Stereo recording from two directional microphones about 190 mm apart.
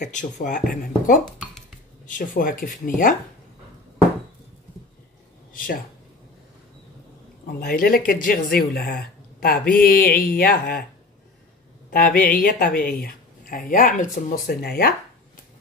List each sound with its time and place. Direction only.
0.0 s speech: 45° left (ahead or behind)
5.5 s speech: 50° left (ahead or behind)
7.6 s speech: 50° left (ahead or behind)
11.9 s speech: 50° left (ahead or behind)